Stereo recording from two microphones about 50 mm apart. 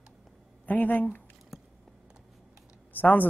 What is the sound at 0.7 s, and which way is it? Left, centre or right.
Speech, left.